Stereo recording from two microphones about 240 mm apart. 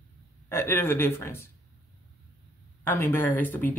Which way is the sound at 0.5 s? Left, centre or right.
Centre.